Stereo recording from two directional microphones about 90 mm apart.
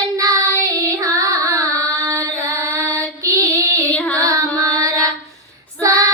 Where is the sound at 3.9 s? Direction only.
15° left (ahead or behind).